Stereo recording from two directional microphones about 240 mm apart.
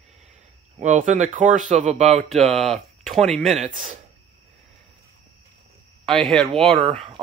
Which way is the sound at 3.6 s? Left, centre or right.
Right.